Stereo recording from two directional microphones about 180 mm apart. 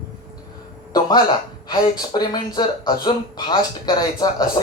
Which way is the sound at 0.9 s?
25° left (ahead or behind).